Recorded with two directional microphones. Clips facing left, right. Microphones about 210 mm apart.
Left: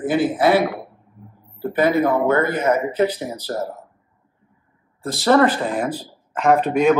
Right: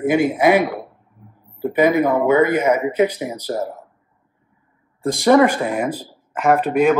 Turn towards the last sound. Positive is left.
turn(degrees=-5)  # may be behind; listen again after turning